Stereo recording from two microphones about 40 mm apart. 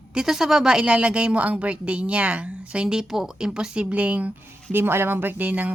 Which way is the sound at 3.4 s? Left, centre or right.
Centre.